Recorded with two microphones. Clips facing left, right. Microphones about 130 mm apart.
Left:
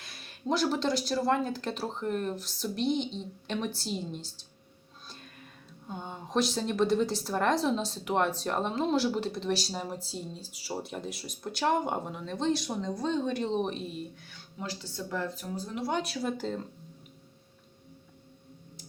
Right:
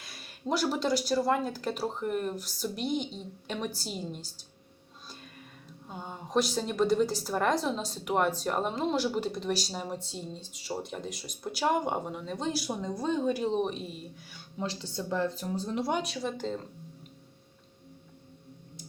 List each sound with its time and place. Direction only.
0.0 s a woman's voice: centre (ahead or behind)
5.9 s a woman's voice: centre (ahead or behind)
14.3 s speech: 20° right (ahead or behind)
15.9 s a woman's voice: centre (ahead or behind)